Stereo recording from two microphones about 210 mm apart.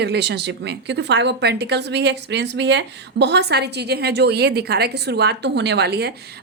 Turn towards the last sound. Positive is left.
turn(degrees=-50)  # may be behind; listen again after turning